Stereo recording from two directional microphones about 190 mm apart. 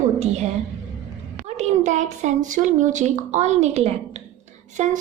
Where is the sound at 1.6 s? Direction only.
40° right (ahead or behind).